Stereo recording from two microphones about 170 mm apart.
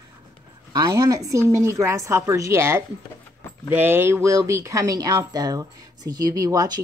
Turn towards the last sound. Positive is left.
turn(degrees=-20)  # may be behind; listen again after turning